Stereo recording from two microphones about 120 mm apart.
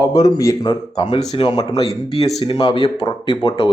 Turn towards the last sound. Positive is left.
turn(degrees=40)  # may be behind; listen again after turning